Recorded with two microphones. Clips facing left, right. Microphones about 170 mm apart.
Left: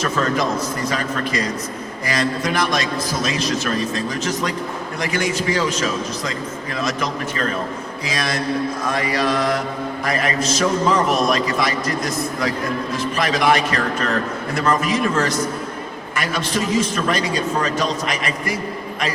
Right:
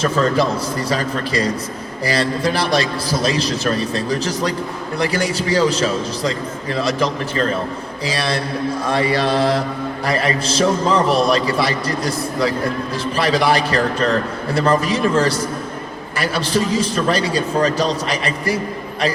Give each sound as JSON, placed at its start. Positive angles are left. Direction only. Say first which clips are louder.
{"t": 0.0, "sound": "a man's voice", "louder": "right 3 dB", "side_deg": -35}